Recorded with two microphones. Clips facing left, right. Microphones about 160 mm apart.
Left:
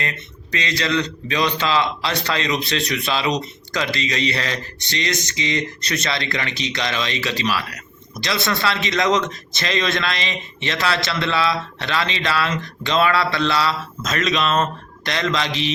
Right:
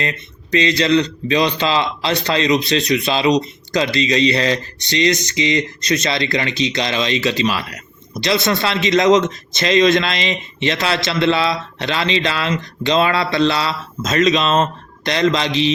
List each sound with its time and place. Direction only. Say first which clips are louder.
0.5 s a man's voice: right 7 dB; 25° right (ahead or behind)
6.6 s a man's voice: right 4 dB; 25° right (ahead or behind)